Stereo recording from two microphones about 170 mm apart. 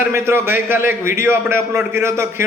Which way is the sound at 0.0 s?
15° right (ahead or behind).